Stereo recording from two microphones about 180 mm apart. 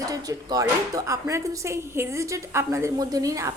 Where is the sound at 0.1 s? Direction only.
20° right (ahead or behind).